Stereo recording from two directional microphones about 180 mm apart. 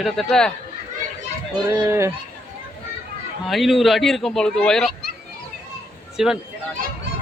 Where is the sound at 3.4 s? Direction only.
Centre (ahead or behind).